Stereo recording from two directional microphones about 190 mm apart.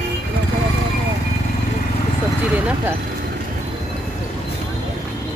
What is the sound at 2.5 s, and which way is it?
Speech, 10° right (ahead or behind).